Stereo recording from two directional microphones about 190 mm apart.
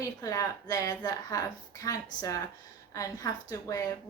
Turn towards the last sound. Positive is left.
turn(degrees=20)  # may be behind; listen again after turning